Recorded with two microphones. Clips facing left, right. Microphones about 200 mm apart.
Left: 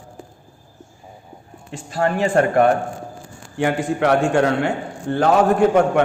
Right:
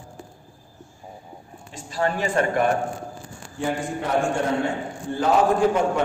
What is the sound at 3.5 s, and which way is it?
A man's voice, 75° left (ahead or behind).